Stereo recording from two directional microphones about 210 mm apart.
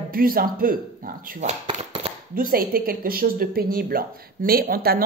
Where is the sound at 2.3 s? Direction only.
45° right (ahead or behind).